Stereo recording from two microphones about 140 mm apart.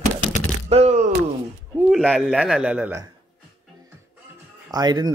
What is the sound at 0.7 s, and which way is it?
Speech, 50° right (ahead or behind).